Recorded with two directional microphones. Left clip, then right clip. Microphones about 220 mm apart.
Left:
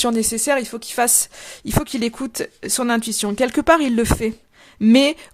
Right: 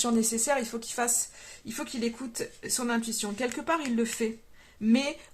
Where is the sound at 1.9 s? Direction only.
55° left (ahead or behind).